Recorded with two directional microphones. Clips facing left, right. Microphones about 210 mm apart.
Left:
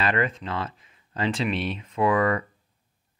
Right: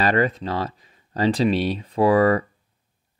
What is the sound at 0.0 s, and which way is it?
Speech, 40° right (ahead or behind).